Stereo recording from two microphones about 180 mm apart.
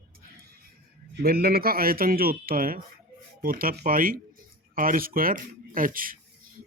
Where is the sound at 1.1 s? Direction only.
60° right (ahead or behind).